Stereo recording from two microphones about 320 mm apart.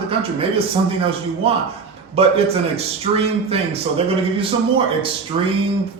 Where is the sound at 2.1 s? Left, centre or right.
Centre.